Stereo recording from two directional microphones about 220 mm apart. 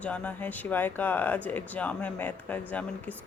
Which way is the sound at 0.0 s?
5° left (ahead or behind).